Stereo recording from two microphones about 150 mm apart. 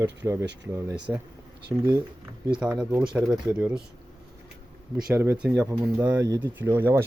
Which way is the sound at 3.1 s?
5° right (ahead or behind).